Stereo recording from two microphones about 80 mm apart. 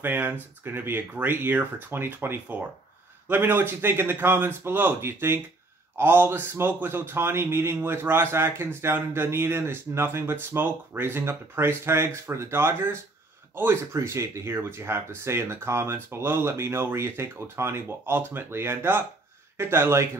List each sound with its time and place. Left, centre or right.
0.0 s a man's voice: right
13.9 s speech: right